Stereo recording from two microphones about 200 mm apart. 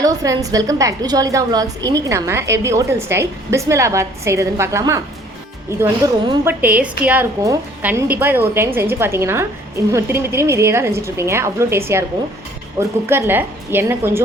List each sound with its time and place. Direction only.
0.0 s a woman's voice: 15° right (ahead or behind)
13.1 s a woman's voice: 10° right (ahead or behind)